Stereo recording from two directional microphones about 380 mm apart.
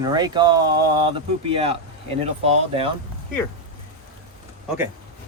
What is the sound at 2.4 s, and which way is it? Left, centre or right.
Speech, centre.